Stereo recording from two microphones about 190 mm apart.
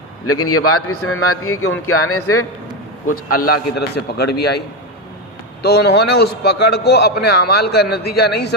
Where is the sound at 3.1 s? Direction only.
55° left (ahead or behind).